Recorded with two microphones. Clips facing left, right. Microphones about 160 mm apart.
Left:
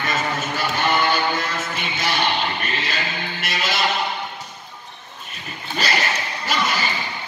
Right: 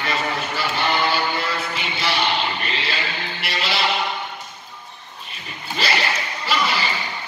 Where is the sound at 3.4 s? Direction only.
45° left (ahead or behind).